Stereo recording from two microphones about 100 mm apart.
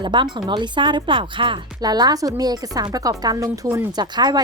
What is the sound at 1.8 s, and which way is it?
A woman's voice, 40° right (ahead or behind).